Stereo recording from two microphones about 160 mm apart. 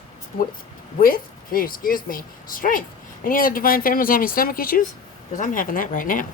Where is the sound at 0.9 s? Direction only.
60° left (ahead or behind).